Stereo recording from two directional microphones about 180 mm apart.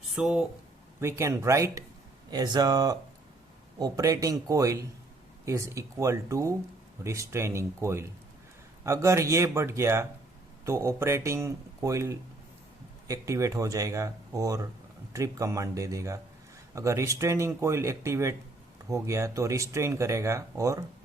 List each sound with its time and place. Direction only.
0.1 s speech: 5° right (ahead or behind)
0.9 s speech: 15° right (ahead or behind)